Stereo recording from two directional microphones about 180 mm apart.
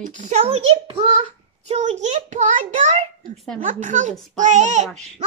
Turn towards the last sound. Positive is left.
turn(degrees=-40)  # may be behind; listen again after turning